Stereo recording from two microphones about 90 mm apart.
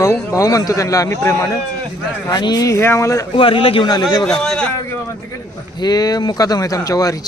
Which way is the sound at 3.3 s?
85° left.